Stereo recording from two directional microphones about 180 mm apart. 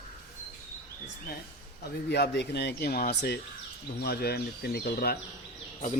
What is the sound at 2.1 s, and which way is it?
Speech, 65° left (ahead or behind).